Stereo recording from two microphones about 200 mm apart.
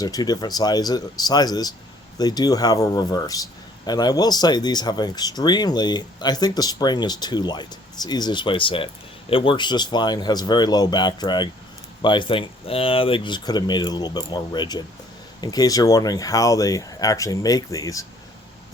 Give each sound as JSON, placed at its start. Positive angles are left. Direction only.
{"t": 0.0, "sound": "speech", "side_deg": 20}